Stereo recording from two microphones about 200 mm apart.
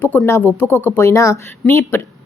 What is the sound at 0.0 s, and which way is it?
A woman's voice, 10° left (ahead or behind).